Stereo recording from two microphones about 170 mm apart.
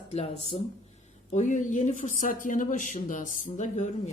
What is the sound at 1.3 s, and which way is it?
Speech, 45° left (ahead or behind).